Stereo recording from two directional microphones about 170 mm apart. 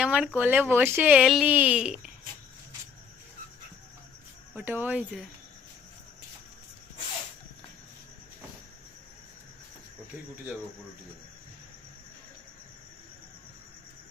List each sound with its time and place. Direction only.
0.0 s speech: 5° right (ahead or behind)
4.5 s speech: 10° right (ahead or behind)